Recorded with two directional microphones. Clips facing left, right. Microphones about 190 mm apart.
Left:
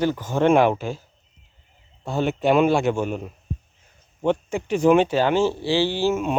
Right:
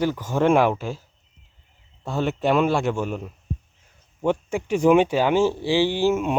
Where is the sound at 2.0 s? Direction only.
Centre (ahead or behind).